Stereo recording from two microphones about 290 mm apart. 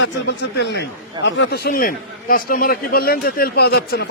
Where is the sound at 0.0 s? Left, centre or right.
Left.